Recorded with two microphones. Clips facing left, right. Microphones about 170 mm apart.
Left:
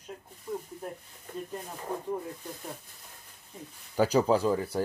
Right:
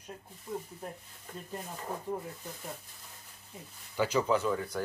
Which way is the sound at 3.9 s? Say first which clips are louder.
Left 4 dB; 40° left (ahead or behind).